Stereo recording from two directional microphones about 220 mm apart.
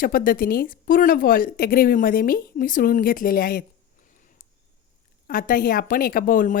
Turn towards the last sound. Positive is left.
turn(degrees=40)  # may be behind; listen again after turning